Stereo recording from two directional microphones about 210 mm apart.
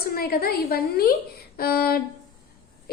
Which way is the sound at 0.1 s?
45° left (ahead or behind).